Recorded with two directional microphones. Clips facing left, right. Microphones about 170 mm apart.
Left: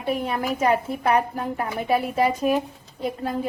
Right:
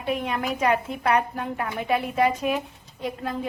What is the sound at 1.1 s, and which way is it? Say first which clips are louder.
A woman's voice: left 1 dB; 30° left (ahead or behind).